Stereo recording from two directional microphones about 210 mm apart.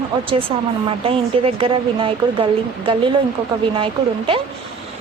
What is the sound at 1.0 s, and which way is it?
A woman's voice, 25° right (ahead or behind).